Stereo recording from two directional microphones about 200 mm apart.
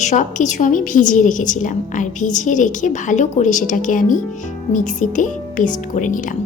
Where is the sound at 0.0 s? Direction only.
35° left (ahead or behind).